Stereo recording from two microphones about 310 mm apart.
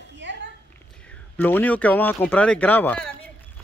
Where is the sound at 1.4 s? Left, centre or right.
Centre.